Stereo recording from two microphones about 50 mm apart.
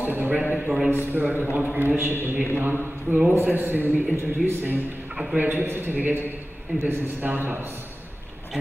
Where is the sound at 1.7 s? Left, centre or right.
Right.